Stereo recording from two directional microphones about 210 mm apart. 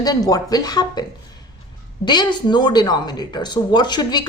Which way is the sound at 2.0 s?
20° left (ahead or behind).